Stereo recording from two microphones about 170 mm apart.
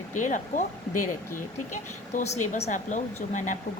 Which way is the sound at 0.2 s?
50° left (ahead or behind).